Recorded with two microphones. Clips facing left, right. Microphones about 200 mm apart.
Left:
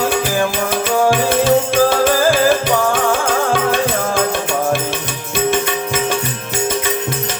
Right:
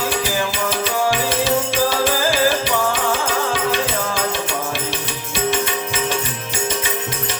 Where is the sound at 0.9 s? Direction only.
50° left (ahead or behind).